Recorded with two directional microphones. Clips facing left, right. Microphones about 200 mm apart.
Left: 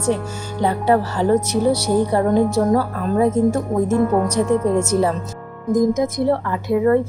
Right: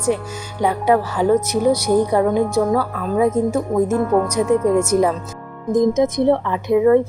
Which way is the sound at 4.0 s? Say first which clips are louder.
Even; 10° left (ahead or behind).